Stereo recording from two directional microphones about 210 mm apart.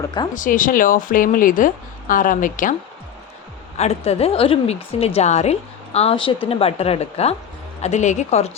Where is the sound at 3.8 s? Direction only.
30° left (ahead or behind).